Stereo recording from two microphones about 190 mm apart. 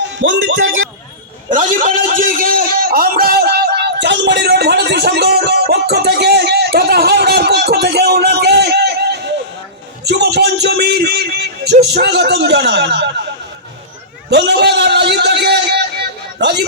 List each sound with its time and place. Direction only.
0.2 s speech: 70° right (ahead or behind); by 0.9 s 90° right
1.5 s a sound: 45° right (ahead or behind); by 15.8 s 60° right (ahead or behind)
16.4 s speech: 60° right (ahead or behind)